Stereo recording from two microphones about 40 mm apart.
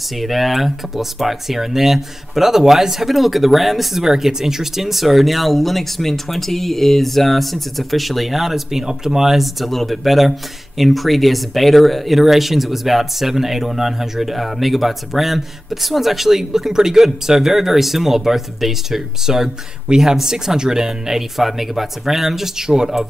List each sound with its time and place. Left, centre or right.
0.2 s speech: centre
4.0 s speech: centre